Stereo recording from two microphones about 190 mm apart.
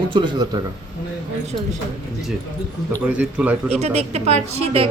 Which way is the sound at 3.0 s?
10° right (ahead or behind).